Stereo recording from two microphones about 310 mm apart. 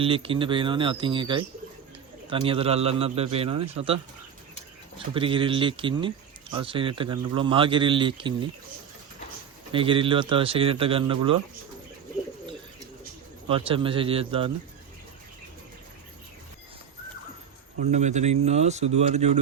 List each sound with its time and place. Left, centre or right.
0.0 s speech: centre
9.7 s speech: centre
13.5 s speech: centre
17.9 s speech: right